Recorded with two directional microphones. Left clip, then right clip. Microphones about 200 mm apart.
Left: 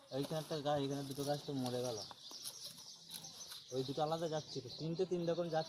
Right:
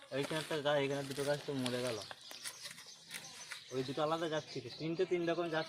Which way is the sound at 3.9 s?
80° right.